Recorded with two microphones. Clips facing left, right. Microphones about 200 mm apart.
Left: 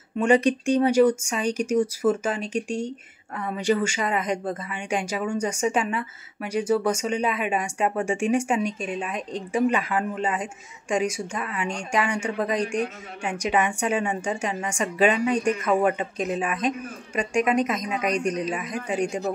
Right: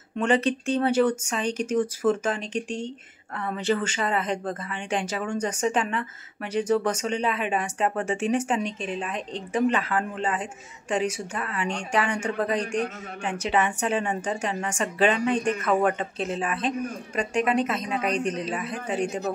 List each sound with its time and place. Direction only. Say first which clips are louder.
0.2 s speech: left 3 dB; 10° left (ahead or behind)
17.8 s a woman's voice: left 1 dB; 35° right (ahead or behind)
18.2 s speech: left 2 dB; 10° left (ahead or behind)